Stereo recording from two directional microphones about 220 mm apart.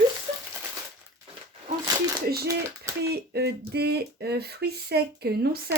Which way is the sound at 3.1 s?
45° right (ahead or behind).